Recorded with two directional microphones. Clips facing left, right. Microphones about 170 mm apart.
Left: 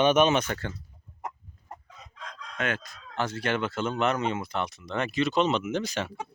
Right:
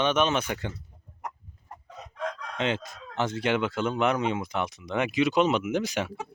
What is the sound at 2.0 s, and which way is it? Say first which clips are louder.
Chicken: right 10 dB; 65° right (ahead or behind).